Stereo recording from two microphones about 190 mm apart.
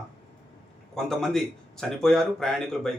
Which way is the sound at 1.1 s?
Centre (ahead or behind).